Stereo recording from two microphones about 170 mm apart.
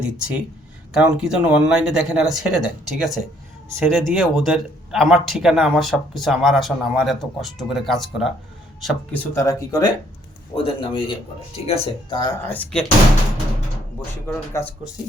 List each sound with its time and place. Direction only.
0.0 s speech: 5° right (ahead or behind)
9.3 s speech: 20° left (ahead or behind)
12.5 s speech: 10° left (ahead or behind)
14.3 s speech: 15° left (ahead or behind)